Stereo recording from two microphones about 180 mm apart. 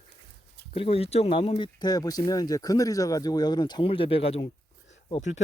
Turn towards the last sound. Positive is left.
turn(degrees=35)  # may be behind; listen again after turning